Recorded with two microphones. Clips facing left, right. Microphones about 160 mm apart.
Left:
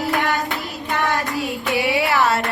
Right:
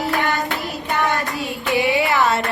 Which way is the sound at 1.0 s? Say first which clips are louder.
Left 1 dB; centre (ahead or behind).